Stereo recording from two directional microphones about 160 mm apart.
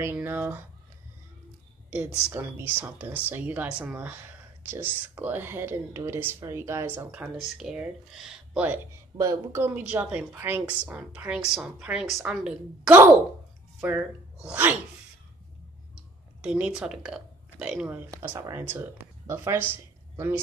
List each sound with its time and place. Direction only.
0.0 s speech: 15° right (ahead or behind)
1.9 s a woman's voice: 10° right (ahead or behind)
15.9 s burping: 5° right (ahead or behind)
18.4 s speech: 15° right (ahead or behind)